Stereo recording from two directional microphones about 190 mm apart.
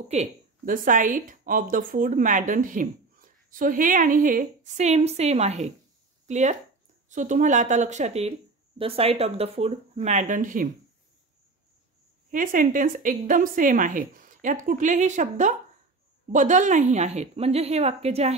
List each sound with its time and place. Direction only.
0.1 s speech: 40° right (ahead or behind)
12.3 s speech: 45° right (ahead or behind)